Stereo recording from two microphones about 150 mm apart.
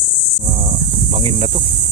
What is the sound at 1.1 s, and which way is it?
Speech, 35° right (ahead or behind).